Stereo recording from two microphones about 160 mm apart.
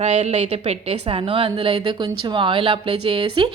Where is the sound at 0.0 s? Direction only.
45° right (ahead or behind).